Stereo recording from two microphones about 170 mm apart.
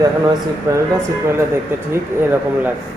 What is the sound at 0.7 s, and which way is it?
Speech, 20° right (ahead or behind).